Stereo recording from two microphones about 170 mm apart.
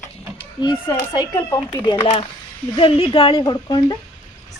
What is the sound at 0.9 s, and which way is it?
A woman's voice, 15° left (ahead or behind).